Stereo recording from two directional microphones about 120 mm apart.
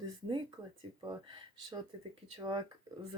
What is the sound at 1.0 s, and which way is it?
Speech, 40° right (ahead or behind).